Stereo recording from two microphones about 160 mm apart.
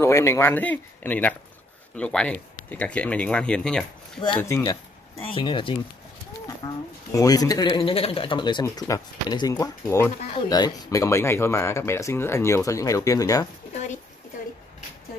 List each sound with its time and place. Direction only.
0.0 s speech: 15° left (ahead or behind)
4.4 s speech: 20° left (ahead or behind)
5.2 s a man's voice: 30° left (ahead or behind)